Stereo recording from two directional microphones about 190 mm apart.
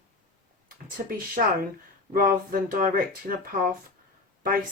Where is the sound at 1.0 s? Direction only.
45° right (ahead or behind).